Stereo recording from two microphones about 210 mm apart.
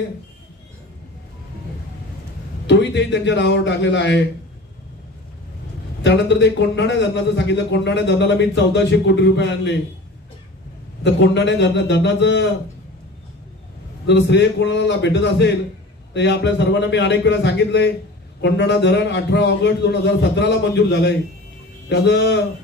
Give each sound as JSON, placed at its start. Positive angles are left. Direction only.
{"t": 2.6, "sound": "a man's voice", "side_deg": 60}
{"t": 6.0, "sound": "a man's voice", "side_deg": 55}
{"t": 11.1, "sound": "a man's voice", "side_deg": 60}
{"t": 14.0, "sound": "a man's voice", "side_deg": 55}